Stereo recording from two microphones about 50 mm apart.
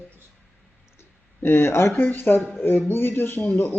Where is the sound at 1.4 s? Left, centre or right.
Left.